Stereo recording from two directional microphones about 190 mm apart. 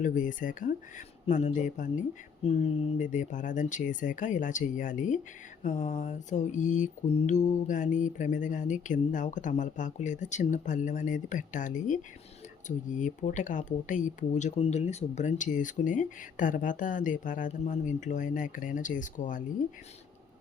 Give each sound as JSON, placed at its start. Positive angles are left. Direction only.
{"t": 0.0, "sound": "mantra", "side_deg": 45}
{"t": 12.6, "sound": "speech", "side_deg": 40}